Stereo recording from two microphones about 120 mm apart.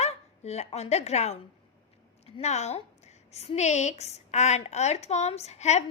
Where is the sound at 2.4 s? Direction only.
70° left (ahead or behind).